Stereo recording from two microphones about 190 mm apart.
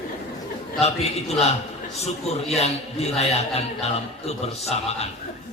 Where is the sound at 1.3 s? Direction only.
35° left (ahead or behind).